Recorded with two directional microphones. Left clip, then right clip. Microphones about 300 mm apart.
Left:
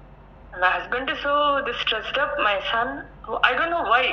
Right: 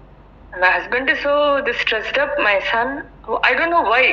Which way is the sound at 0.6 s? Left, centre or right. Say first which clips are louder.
Right 6 dB; centre.